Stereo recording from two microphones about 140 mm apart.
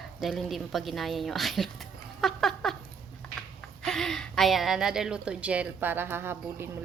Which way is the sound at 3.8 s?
5° left (ahead or behind).